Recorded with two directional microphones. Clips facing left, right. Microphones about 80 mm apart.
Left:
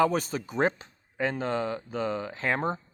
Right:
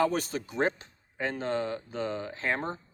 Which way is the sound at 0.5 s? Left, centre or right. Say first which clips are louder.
Left 3 dB; left.